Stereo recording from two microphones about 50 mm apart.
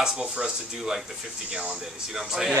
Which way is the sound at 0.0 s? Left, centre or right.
Centre.